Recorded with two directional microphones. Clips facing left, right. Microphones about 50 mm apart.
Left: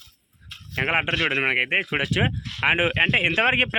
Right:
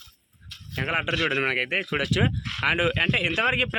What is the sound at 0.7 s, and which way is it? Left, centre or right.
Speech, left.